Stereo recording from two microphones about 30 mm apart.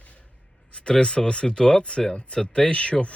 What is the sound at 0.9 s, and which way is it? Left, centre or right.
Speech, left.